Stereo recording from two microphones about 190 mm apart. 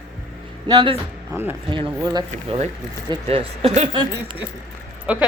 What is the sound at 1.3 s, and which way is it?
Speech, 10° right (ahead or behind).